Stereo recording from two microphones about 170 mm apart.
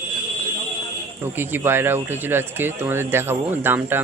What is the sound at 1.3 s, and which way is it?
Speech, 15° right (ahead or behind).